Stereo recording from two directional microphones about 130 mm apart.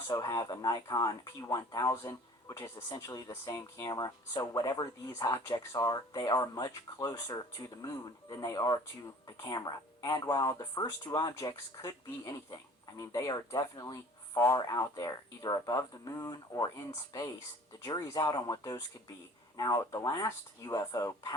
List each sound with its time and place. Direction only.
0.1 s speech: 25° left (ahead or behind)